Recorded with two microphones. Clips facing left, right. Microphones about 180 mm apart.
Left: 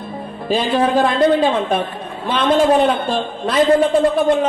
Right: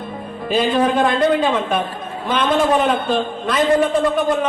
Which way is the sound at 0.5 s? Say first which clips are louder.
Left 1 dB; 35° left (ahead or behind).